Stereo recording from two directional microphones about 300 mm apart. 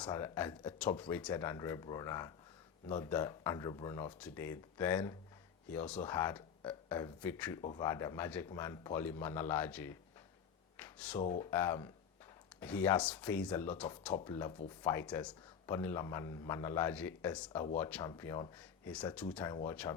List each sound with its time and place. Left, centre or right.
0.0 s a man's voice: centre
10.8 s a sound: centre
11.3 s a man's voice: centre